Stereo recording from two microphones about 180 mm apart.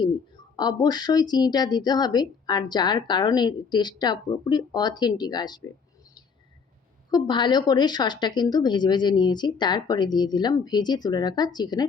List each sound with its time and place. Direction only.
0.5 s a woman's voice: 25° left (ahead or behind)
7.1 s a woman's voice: 25° left (ahead or behind)